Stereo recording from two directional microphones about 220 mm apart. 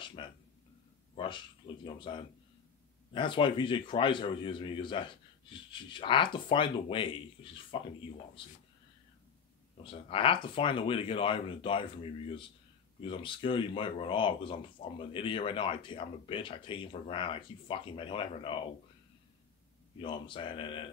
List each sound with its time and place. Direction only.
0.0 s a sound: 20° left (ahead or behind)
1.6 s speech: 30° left (ahead or behind)
9.8 s speech: 25° left (ahead or behind)
20.0 s speech: 20° left (ahead or behind)